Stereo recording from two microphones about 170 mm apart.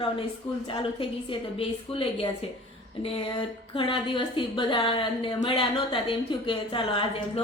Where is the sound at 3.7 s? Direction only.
30° left (ahead or behind).